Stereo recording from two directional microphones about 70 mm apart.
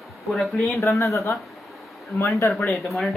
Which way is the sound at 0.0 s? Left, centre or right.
Centre.